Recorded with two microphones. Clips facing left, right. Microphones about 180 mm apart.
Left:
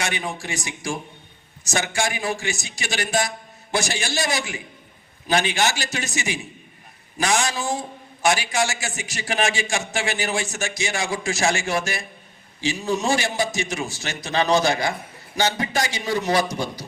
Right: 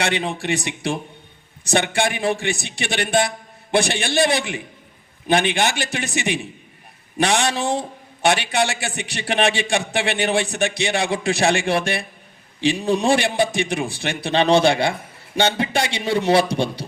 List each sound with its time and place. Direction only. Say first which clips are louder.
0.0 s a man's voice: right 5 dB; 70° right (ahead or behind)
14.2 s a man's voice: right 4 dB; 30° right (ahead or behind)